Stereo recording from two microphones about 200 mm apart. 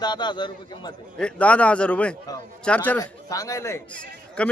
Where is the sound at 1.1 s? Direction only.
5° left (ahead or behind).